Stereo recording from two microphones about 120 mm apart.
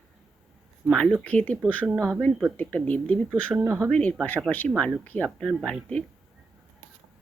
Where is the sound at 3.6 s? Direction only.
25° right (ahead or behind).